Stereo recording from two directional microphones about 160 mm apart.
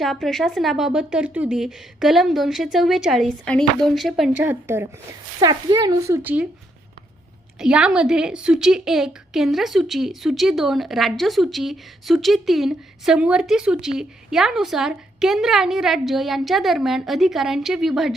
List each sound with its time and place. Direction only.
0.0 s a woman's voice: centre (ahead or behind)
4.4 s a woman's voice: 15° right (ahead or behind)
5.4 s a child's voice: 25° right (ahead or behind)
7.6 s a woman's voice: 5° right (ahead or behind)